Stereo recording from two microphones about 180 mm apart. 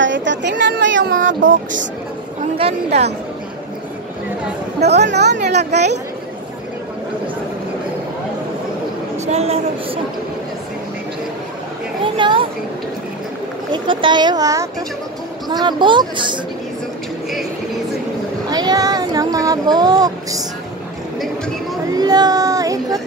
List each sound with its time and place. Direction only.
0.0 s speech: 85° right
2.5 s a woman's voice: 35° right (ahead or behind)
4.7 s speech: 70° right (ahead or behind)
9.2 s speech: 35° right (ahead or behind)
12.0 s a sound: 25° right (ahead or behind)
13.7 s speech: 25° right (ahead or behind)
18.5 s speech: 20° right (ahead or behind)
21.9 s speech: 20° right (ahead or behind)